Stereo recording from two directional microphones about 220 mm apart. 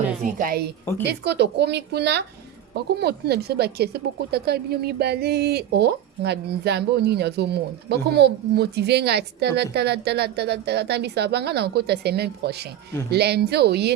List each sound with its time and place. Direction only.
0.2 s a woman's voice: 35° right (ahead or behind)